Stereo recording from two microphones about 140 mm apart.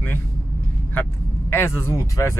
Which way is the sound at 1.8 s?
20° left (ahead or behind).